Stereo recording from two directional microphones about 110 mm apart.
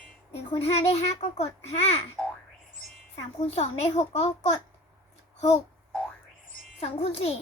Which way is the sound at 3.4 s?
70° left (ahead or behind).